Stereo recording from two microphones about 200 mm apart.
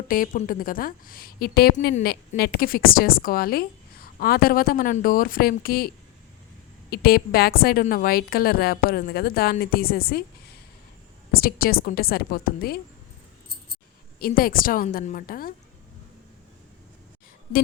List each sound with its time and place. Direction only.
0.1 s a woman's voice: 45° left (ahead or behind)
6.9 s a woman's voice: 50° left (ahead or behind)
11.3 s a woman's voice: 50° left (ahead or behind)
14.2 s a woman's voice: 45° left (ahead or behind)